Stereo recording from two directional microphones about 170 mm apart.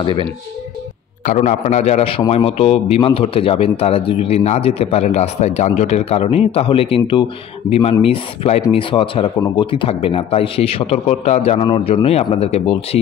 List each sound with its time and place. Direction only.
0.0 s speech: 30° left (ahead or behind)
1.2 s a man's voice: 45° left (ahead or behind)